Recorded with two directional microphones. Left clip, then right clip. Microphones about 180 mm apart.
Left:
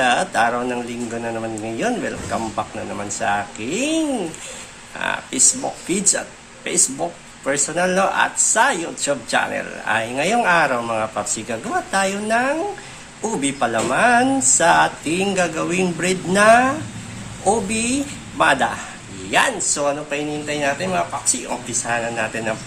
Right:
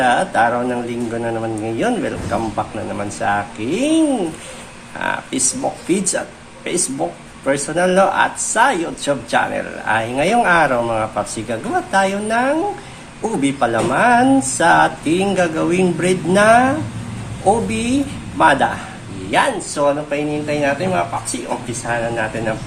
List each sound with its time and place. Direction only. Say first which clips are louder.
0.0 s a woman's voice: right 3 dB; 15° left (ahead or behind)